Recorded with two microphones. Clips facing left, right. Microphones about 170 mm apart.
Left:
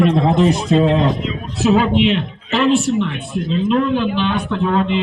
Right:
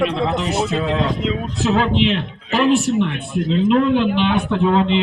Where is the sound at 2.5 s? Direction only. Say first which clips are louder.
Left 1 dB; 15° right (ahead or behind).